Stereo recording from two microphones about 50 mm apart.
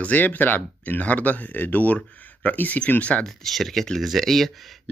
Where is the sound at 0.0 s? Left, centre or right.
Left.